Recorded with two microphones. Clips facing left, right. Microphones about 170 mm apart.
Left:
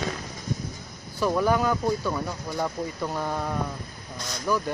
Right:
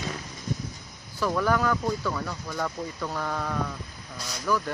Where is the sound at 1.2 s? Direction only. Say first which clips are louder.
Left 2 dB; 20° left (ahead or behind).